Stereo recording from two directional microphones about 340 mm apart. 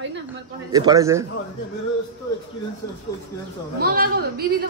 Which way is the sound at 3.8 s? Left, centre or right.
Right.